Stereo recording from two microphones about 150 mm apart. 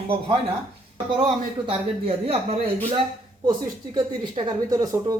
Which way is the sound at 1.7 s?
45° right (ahead or behind).